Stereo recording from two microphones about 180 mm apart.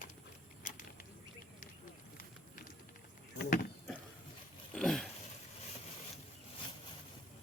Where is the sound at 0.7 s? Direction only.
45° left (ahead or behind).